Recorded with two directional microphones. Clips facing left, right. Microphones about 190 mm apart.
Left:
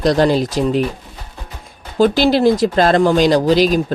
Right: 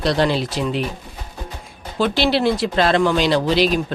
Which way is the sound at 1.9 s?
45° left (ahead or behind).